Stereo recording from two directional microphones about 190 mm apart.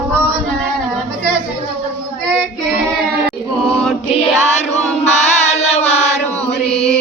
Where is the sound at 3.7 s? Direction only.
Centre (ahead or behind).